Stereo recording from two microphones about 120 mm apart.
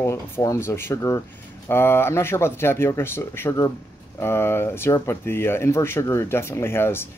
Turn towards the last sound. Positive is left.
turn(degrees=20)  # may be behind; listen again after turning